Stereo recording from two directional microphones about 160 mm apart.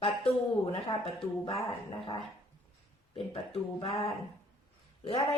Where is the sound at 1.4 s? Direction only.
30° left (ahead or behind).